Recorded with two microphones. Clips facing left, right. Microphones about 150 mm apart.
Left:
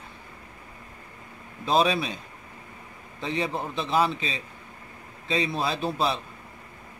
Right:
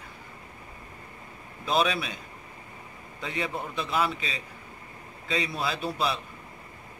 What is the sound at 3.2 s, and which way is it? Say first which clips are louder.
Speech: left 4 dB; 25° left (ahead or behind).